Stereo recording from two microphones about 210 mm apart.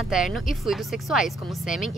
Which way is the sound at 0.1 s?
Centre (ahead or behind).